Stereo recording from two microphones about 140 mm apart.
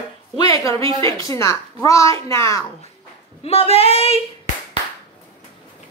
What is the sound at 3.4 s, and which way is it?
Speech, 45° left (ahead or behind).